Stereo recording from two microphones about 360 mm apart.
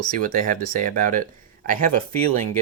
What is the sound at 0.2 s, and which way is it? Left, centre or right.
Speech, right.